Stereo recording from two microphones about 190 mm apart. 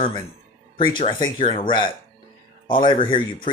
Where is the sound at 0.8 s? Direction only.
25° left (ahead or behind).